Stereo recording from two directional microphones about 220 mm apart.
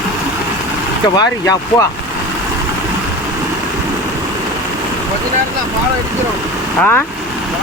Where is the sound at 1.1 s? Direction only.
15° left (ahead or behind).